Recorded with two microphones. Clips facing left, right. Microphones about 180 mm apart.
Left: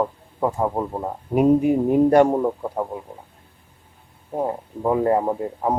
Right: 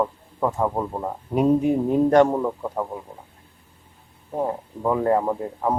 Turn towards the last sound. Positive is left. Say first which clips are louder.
# left 1 dB
turn(degrees=15)  # may be behind; listen again after turning